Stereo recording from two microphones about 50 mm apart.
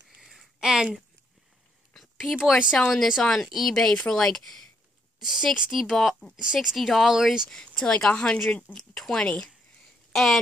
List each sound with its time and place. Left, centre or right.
0.1 s a sound: centre
2.1 s speech: centre
3.2 s speech: centre
5.2 s speech: centre
6.3 s speech: centre
7.8 s speech: centre
9.2 s speech: left
10.1 s speech: centre